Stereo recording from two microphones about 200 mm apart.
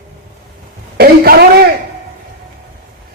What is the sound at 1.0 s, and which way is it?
Speech, 50° right (ahead or behind).